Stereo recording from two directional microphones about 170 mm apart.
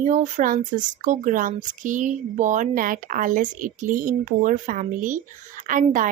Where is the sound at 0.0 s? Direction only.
45° right (ahead or behind).